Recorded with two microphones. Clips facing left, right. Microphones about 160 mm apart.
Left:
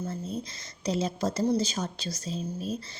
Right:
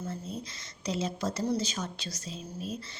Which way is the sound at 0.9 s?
35° left (ahead or behind).